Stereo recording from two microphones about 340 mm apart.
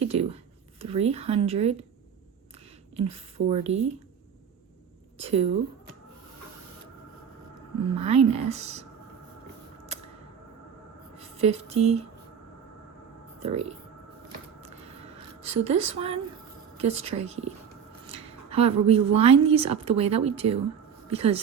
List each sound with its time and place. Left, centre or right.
0.0 s a sound: centre
0.8 s speech: centre
2.9 s speech: centre
5.1 s a woman's voice: centre
7.9 s speech: centre
9.9 s a sound: centre
11.2 s speech: centre
13.4 s speech: centre
15.4 s a woman's voice: centre